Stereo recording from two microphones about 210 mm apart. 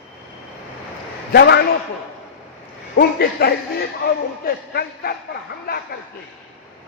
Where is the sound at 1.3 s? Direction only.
55° left (ahead or behind).